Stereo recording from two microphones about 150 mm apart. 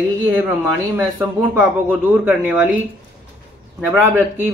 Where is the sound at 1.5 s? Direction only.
10° right (ahead or behind).